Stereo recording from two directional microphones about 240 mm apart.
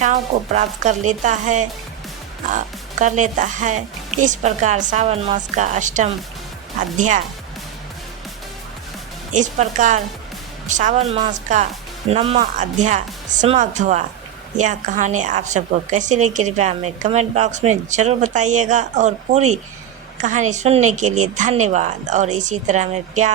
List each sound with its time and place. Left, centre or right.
0.0 s speech: right
9.3 s speech: right